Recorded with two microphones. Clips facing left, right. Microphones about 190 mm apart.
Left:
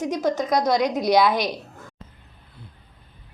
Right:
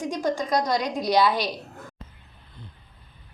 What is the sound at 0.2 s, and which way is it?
Speech, 40° left (ahead or behind).